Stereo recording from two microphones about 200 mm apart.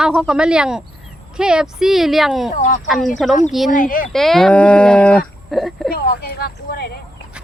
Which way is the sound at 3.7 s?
40° left (ahead or behind).